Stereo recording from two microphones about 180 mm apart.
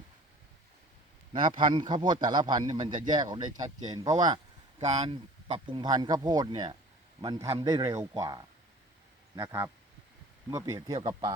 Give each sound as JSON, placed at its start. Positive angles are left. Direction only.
{"t": 1.3, "sound": "speech", "side_deg": -25}
{"t": 4.8, "sound": "a man's voice", "side_deg": -40}